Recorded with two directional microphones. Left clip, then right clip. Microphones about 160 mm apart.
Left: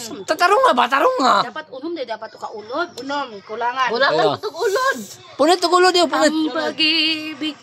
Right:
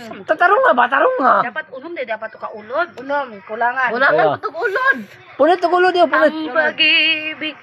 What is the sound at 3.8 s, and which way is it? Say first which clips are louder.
Speech: left 1 dB; 65° left (ahead or behind).